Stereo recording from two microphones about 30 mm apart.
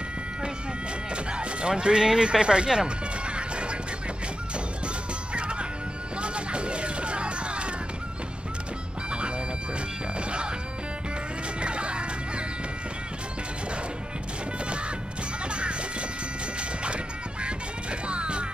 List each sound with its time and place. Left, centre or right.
1.1 s speech: right
3.3 s music: right
5.3 s music: right
6.2 s a sound: right
11.6 s music: right
16.8 s music: right